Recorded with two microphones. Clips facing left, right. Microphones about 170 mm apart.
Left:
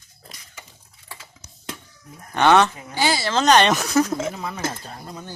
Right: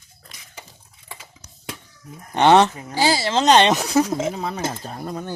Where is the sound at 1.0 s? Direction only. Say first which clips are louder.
Right 1 dB; 20° right (ahead or behind).